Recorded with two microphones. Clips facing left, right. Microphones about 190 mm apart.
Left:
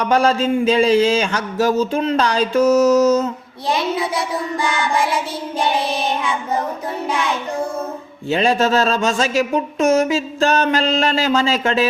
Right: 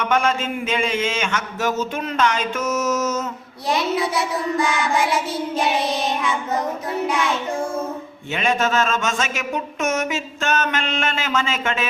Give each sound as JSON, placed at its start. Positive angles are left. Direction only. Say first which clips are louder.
{"t": 0.0, "sound": "speech", "louder": "left 5 dB", "side_deg": 35}
{"t": 8.3, "sound": "speech", "louder": "left 5 dB", "side_deg": 35}